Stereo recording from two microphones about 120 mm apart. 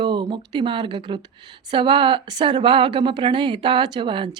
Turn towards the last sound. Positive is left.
turn(degrees=-45)  # may be behind; listen again after turning